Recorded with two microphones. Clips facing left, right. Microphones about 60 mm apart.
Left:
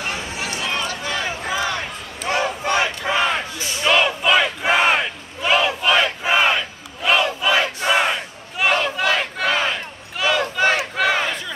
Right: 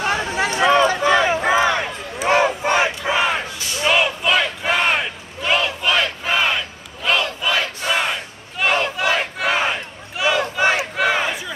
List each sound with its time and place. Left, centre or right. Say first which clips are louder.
0.1 s a sound: right 7 dB; right
0.8 s a sound: right 9 dB; right
2.2 s battle cry: right 5 dB; right
3.0 s battle cry: right 1 dB; centre
8.7 s battle cry: right 2 dB; centre
10.1 s crowd: right 1 dB; centre
11.0 s battle cry: even; centre